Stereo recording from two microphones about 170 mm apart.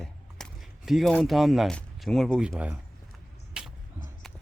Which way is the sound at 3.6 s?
5° right (ahead or behind).